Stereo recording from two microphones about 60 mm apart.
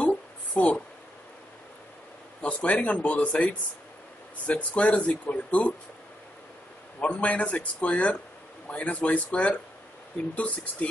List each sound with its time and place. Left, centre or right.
0.0 s a sound: left
2.4 s a man's voice: left
7.0 s a man's voice: left